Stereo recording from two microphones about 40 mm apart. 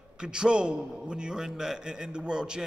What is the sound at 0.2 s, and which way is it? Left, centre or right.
A man's voice, right.